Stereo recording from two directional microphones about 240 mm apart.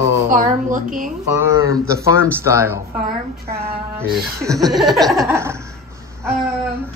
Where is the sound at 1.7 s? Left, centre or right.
Centre.